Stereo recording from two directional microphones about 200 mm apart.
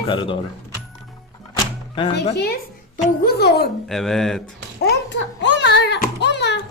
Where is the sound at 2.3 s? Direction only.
50° left (ahead or behind).